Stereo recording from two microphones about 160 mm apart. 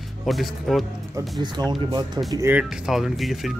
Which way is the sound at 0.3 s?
Centre (ahead or behind).